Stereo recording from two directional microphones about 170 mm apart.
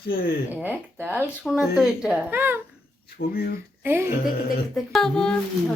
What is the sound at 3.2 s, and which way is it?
Speech, 65° left (ahead or behind).